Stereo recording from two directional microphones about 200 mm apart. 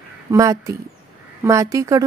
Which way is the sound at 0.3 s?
15° right (ahead or behind).